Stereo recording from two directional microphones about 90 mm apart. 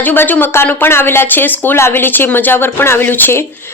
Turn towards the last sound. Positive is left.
turn(degrees=25)  # may be behind; listen again after turning